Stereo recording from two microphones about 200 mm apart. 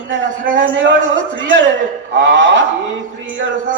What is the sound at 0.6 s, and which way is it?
A man's voice, 65° right (ahead or behind).